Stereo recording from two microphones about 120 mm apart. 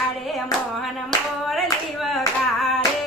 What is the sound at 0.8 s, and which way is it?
Clapping, centre (ahead or behind).